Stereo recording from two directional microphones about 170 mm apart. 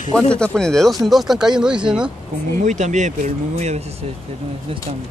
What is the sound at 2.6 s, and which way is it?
Speech, 45° right (ahead or behind).